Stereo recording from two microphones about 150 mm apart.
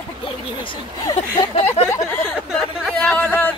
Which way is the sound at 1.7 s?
15° left (ahead or behind).